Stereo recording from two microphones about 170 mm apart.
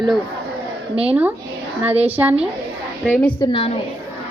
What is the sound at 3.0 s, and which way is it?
Speech, 10° left (ahead or behind).